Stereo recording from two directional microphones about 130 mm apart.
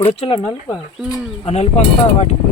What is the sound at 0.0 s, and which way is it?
Speech, 45° left (ahead or behind).